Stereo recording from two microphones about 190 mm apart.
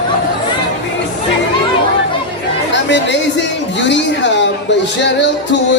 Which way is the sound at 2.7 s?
70° left (ahead or behind).